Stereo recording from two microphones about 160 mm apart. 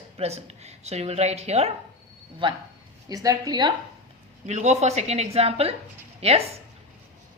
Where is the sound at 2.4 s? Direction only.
30° right (ahead or behind).